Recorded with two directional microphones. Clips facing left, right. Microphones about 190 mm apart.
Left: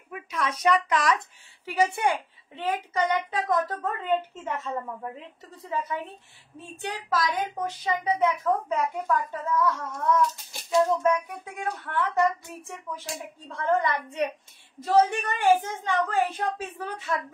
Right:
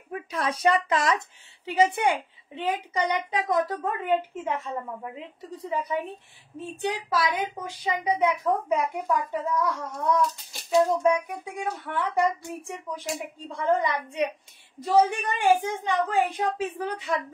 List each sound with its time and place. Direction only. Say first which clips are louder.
0.1 s speech: right 2 dB; 35° right (ahead or behind); by 9.8 s 15° right (ahead or behind)
10.8 s speech: right 1 dB; 15° right (ahead or behind)